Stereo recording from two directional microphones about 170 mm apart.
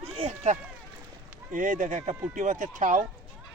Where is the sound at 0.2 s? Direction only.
45° right (ahead or behind).